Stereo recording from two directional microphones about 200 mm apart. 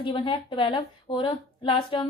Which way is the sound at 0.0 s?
25° left (ahead or behind).